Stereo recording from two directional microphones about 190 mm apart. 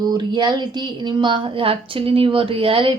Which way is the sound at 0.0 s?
20° right (ahead or behind).